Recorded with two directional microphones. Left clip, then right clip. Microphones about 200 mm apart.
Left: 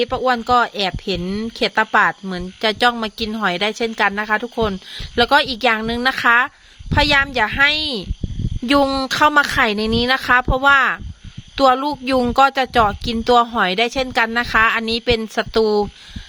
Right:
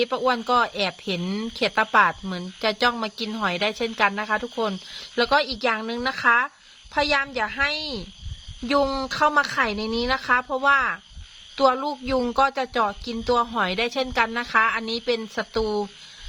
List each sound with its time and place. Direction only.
0.0 s speech: 30° left (ahead or behind)